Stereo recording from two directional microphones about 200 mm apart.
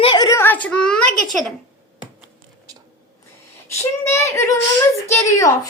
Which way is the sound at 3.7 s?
15° left (ahead or behind).